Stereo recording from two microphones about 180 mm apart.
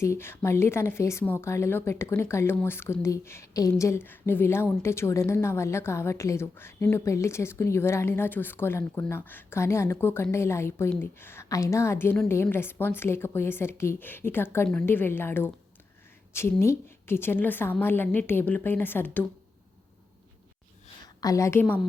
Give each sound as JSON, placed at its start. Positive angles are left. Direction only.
{"t": 0.0, "sound": "a woman's voice", "side_deg": 15}
{"t": 21.2, "sound": "a woman's voice", "side_deg": 20}